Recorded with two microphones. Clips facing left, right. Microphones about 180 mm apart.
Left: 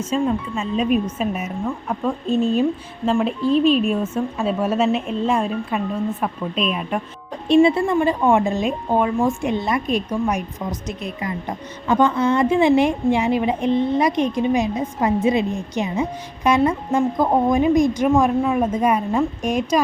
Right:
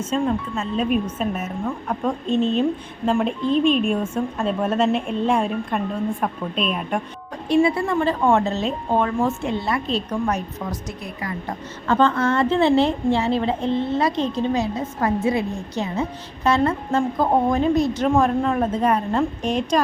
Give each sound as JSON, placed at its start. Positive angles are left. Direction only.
{"t": 0.1, "sound": "a woman's voice", "side_deg": 10}
{"t": 7.4, "sound": "speech", "side_deg": 25}
{"t": 7.9, "sound": "a woman's voice", "side_deg": 10}